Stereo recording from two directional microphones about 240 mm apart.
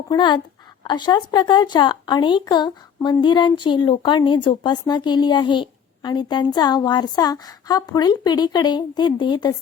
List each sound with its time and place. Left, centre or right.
0.1 s a woman's voice: centre